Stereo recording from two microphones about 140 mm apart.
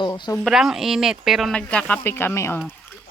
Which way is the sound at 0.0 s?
30° left (ahead or behind).